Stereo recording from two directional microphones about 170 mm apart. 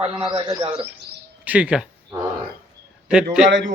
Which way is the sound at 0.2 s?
30° right (ahead or behind).